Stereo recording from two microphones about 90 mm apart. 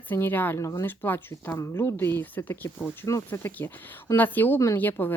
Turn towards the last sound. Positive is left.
turn(degrees=20)  # may be behind; listen again after turning